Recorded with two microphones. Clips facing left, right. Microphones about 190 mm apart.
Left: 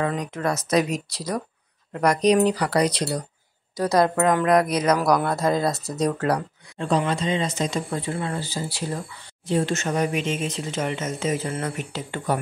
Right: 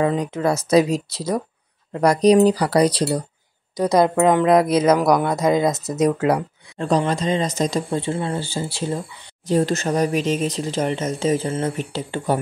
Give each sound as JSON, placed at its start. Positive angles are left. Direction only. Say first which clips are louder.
{"t": 0.0, "sound": "speech", "louder": "right 5 dB", "side_deg": -25}
{"t": 3.7, "sound": "speech", "louder": "right 3 dB", "side_deg": -20}
{"t": 6.8, "sound": "speech", "louder": "right 3 dB", "side_deg": -40}
{"t": 7.9, "sound": "speech", "louder": "right 4 dB", "side_deg": -30}
{"t": 9.5, "sound": "speech", "louder": "right 4 dB", "side_deg": -40}